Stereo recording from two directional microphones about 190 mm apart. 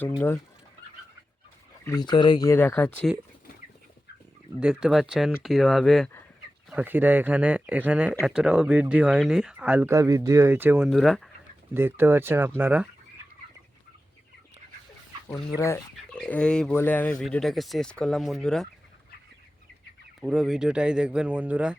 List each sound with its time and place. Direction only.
1.8 s speech: 20° left (ahead or behind)
4.6 s speech: 5° right (ahead or behind)
10.8 s speech: centre (ahead or behind)
11.7 s speech: 10° right (ahead or behind)
15.3 s speech: 15° left (ahead or behind)
16.1 s speech: 5° left (ahead or behind)
20.2 s speech: centre (ahead or behind)